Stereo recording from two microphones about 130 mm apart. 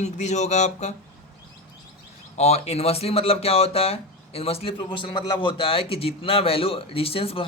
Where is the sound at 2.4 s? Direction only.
55° left (ahead or behind).